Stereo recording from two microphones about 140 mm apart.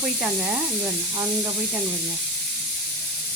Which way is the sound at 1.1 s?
25° right (ahead or behind).